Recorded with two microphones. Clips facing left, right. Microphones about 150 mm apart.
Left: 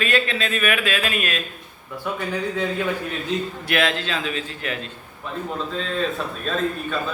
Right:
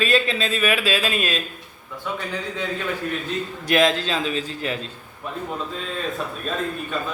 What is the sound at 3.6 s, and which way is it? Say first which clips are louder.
A man's voice: right 5 dB; 40° right (ahead or behind).